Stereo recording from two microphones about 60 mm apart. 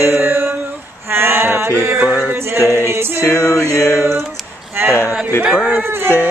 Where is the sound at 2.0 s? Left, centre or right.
Centre.